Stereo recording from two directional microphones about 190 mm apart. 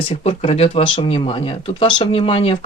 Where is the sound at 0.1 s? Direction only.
30° left (ahead or behind).